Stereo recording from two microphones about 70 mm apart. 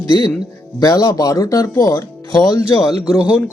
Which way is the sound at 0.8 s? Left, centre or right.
Left.